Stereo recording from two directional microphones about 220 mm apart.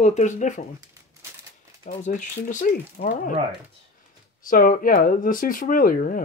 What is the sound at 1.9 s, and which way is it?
Speech, 35° left (ahead or behind).